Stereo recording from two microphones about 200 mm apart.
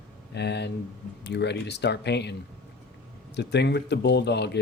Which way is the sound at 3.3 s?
60° left (ahead or behind).